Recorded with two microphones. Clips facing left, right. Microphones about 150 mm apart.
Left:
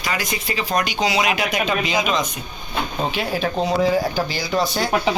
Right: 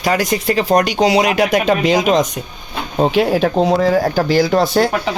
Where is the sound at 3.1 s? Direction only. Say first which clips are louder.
Right 10 dB; 80° right; by 4.8 s 55° right (ahead or behind).